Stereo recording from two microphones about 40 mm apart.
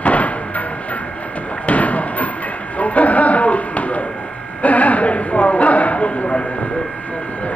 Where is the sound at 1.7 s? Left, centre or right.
Left.